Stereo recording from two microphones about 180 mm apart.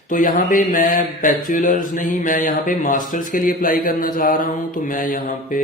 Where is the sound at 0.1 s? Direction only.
50° left (ahead or behind).